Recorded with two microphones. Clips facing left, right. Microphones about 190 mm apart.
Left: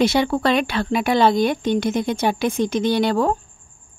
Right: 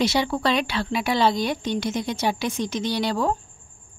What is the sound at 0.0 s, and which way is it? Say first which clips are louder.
A woman's voice: left 4 dB; 55° left (ahead or behind).